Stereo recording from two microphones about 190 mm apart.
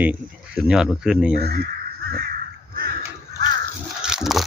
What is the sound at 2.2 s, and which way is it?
Crow, 50° right (ahead or behind).